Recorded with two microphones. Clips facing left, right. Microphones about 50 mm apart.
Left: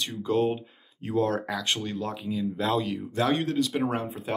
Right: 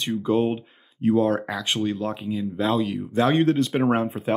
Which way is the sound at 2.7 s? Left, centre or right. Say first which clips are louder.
Right 3 dB; centre.